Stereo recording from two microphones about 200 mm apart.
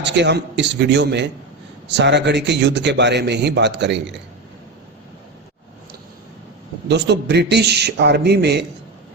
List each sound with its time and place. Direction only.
0.0 s a man's voice: 60° right (ahead or behind)
6.8 s a man's voice: 60° right (ahead or behind)